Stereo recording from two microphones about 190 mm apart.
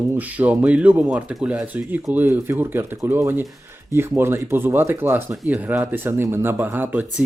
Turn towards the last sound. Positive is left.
turn(degrees=-10)  # may be behind; listen again after turning